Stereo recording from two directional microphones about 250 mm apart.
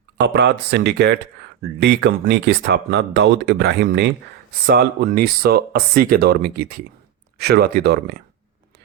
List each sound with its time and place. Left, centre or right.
0.2 s speech: right